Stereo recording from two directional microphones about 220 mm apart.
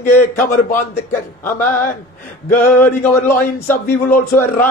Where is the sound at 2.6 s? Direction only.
10° left (ahead or behind).